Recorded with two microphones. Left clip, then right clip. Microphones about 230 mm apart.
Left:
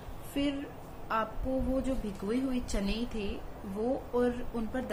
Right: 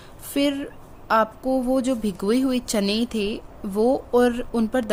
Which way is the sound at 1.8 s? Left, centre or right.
Right.